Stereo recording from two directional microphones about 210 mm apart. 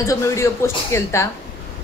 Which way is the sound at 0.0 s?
15° left (ahead or behind).